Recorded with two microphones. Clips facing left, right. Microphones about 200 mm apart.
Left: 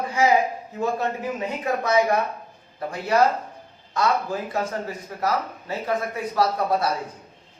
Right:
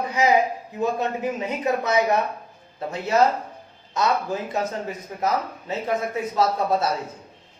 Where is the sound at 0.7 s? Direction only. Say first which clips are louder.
Right 1 dB; 20° right (ahead or behind).